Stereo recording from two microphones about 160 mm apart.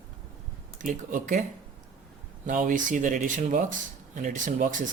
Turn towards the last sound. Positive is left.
turn(degrees=-55)  # may be behind; listen again after turning